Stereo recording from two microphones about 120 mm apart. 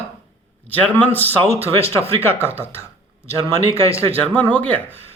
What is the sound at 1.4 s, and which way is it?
Speech, 55° right (ahead or behind).